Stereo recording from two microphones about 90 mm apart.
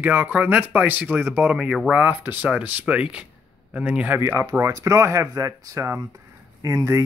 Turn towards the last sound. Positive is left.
turn(degrees=-35)  # may be behind; listen again after turning